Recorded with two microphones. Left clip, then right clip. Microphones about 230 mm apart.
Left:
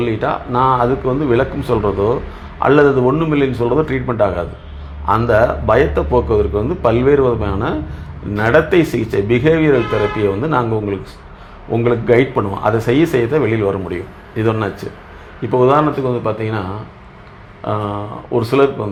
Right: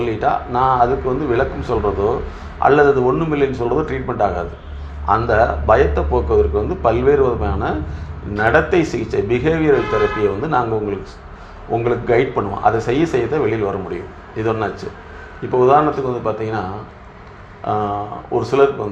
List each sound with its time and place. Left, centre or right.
0.0 s speech: left
18.3 s speech: left